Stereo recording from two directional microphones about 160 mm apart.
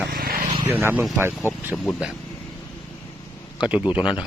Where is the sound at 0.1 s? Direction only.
65° right (ahead or behind).